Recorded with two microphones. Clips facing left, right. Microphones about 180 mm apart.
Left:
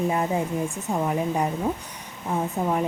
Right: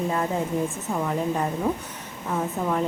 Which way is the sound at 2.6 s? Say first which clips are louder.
Left 2 dB; 15° left (ahead or behind).